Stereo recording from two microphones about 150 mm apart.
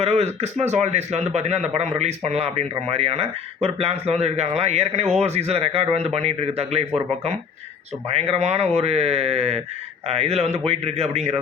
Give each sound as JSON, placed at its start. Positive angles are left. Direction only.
{"t": 0.0, "sound": "speech", "side_deg": -45}